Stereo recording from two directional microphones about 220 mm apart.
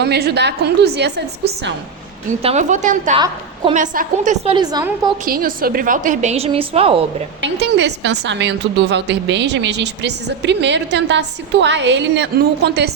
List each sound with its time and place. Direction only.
0.0 s a woman's voice: 45° right (ahead or behind)
2.4 s a woman's voice: 30° right (ahead or behind)
3.2 s a woman's voice: 25° right (ahead or behind)
3.8 s a woman's voice: 35° right (ahead or behind)
4.5 s a woman's voice: 15° right (ahead or behind)
5.2 s a woman's voice: 40° right (ahead or behind)
7.4 s a woman's voice: 50° right (ahead or behind)